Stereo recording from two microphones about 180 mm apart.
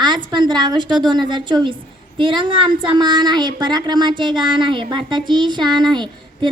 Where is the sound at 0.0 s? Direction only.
25° right (ahead or behind).